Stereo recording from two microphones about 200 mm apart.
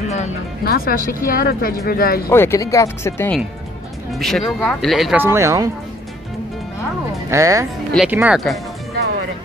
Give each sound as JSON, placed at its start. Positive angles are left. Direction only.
{"t": 0.7, "sound": "speech", "side_deg": 45}
{"t": 2.2, "sound": "speech", "side_deg": 15}
{"t": 4.1, "sound": "speech", "side_deg": 0}
{"t": 5.2, "sound": "speech", "side_deg": -15}
{"t": 7.2, "sound": "speech", "side_deg": -15}
{"t": 7.9, "sound": "speech", "side_deg": -5}